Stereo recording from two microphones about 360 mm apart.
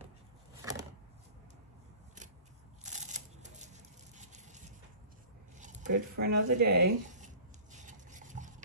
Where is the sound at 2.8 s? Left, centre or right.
Centre.